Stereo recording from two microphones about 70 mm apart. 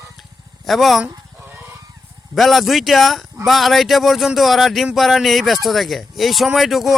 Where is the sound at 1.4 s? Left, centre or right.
Right.